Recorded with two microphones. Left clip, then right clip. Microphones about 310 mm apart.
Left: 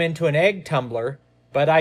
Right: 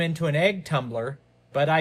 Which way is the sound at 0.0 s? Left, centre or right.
Centre.